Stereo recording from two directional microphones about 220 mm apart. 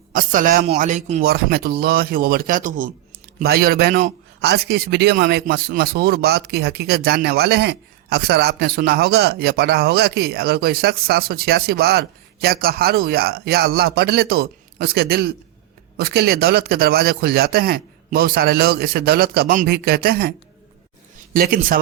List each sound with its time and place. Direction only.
0.1 s a man's voice: 40° right (ahead or behind)
1.2 s a man's voice: 45° right (ahead or behind)
21.3 s a man's voice: 40° right (ahead or behind)